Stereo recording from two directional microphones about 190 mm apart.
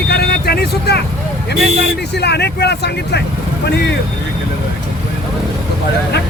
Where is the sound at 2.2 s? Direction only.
60° left (ahead or behind).